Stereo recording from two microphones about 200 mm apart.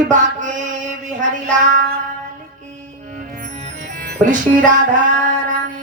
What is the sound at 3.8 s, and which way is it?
Music, 55° right (ahead or behind).